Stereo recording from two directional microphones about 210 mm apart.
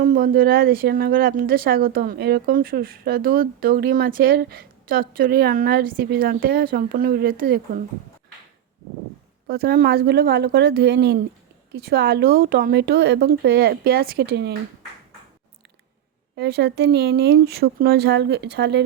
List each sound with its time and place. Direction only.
0.0 s speech: 40° right (ahead or behind)
9.5 s speech: 50° right (ahead or behind)
16.3 s speech: 50° right (ahead or behind)